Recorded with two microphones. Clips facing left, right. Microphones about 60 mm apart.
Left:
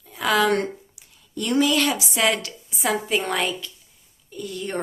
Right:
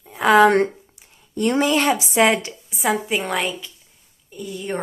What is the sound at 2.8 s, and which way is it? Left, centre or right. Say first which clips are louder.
A woman's voice: right 2 dB; centre.